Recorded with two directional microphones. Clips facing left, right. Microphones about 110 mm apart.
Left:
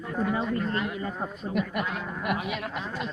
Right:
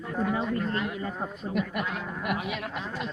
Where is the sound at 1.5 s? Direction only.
35° left (ahead or behind).